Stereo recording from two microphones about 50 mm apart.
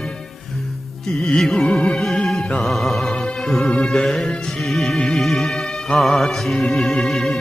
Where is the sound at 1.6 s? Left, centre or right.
Left.